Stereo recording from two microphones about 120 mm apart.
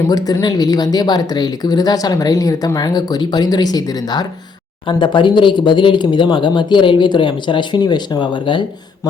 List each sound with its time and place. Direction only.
0.0 s speech: 30° left (ahead or behind)